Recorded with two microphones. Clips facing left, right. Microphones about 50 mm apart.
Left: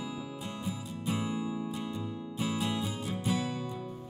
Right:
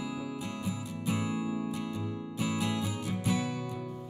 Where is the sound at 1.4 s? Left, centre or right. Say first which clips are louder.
Right 2 dB; right.